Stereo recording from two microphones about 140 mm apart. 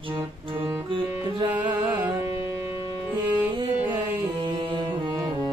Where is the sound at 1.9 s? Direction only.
15° right (ahead or behind).